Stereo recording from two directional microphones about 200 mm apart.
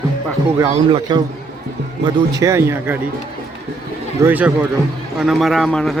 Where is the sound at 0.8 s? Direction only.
30° right (ahead or behind).